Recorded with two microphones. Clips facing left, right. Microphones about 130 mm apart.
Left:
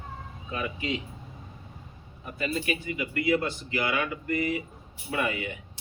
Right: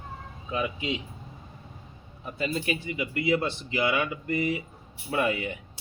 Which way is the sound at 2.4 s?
30° right (ahead or behind).